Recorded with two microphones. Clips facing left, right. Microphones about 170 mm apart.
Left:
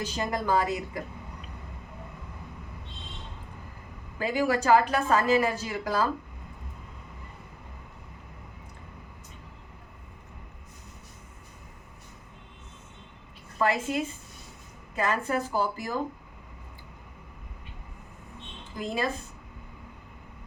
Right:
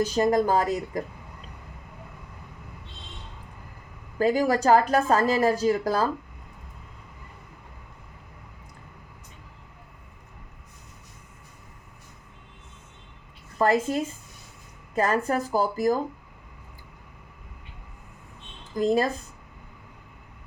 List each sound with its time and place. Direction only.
0.0 s speech: 45° right (ahead or behind)
4.2 s a woman's voice: 40° right (ahead or behind)
13.6 s a woman's voice: 40° right (ahead or behind)
18.8 s a woman's voice: 40° right (ahead or behind)